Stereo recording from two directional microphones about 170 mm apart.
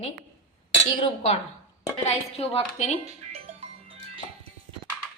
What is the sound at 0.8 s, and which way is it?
A woman's voice, 30° left (ahead or behind).